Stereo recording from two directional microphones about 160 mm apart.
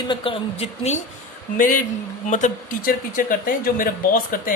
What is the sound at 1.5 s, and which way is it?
Speech, 55° left (ahead or behind).